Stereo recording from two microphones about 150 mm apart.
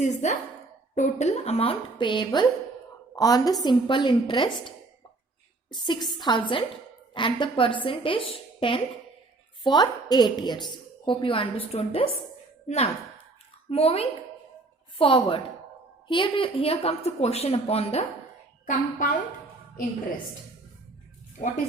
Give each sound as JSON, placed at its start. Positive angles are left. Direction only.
{"t": 0.0, "sound": "a woman's voice", "side_deg": 50}
{"t": 5.7, "sound": "a woman's voice", "side_deg": 30}
{"t": 18.6, "sound": "a woman's voice", "side_deg": 60}